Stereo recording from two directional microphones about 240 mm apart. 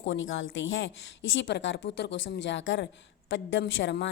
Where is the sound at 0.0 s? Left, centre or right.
Left.